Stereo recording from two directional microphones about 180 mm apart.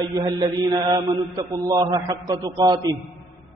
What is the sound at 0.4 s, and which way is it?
A man's voice, 25° right (ahead or behind).